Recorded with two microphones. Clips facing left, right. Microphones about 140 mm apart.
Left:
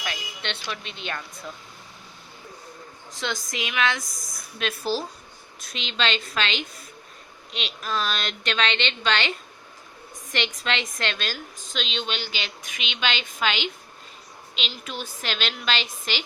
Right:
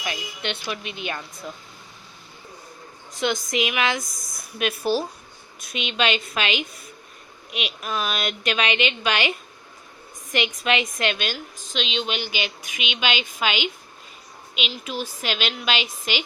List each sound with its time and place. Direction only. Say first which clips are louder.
0.0 s speech: right 3 dB; 10° right (ahead or behind)
3.2 s a woman's voice: right 7 dB; 20° right (ahead or behind)
10.3 s a woman's voice: right 4 dB; 5° right (ahead or behind)
14.7 s a woman's voice: right 5 dB; 5° right (ahead or behind)